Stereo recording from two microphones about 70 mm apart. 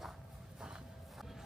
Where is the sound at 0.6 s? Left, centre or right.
Centre.